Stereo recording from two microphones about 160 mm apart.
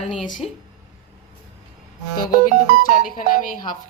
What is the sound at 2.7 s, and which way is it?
Speech, 65° left (ahead or behind).